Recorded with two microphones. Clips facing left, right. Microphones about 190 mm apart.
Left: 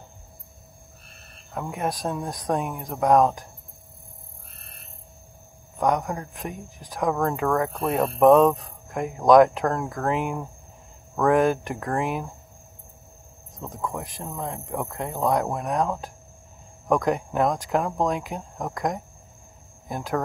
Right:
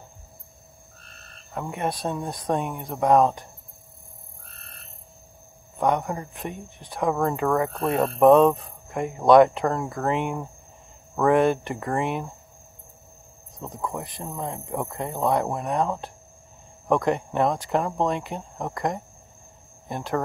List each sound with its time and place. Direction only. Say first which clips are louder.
1.5 s speech: even; centre (ahead or behind)
5.8 s speech: even; centre (ahead or behind)
13.6 s speech: even; centre (ahead or behind)